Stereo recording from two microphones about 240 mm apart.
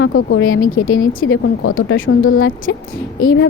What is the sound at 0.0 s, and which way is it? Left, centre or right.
Speech, left.